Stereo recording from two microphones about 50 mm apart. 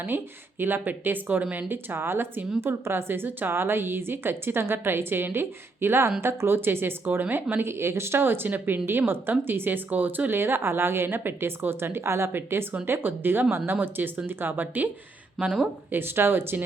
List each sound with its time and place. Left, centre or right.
0.6 s speech: right
1.7 s a woman's voice: right
7.6 s a woman's voice: right
15.9 s a woman's voice: right